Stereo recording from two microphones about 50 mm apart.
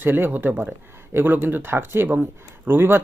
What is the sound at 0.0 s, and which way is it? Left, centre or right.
Speech, right.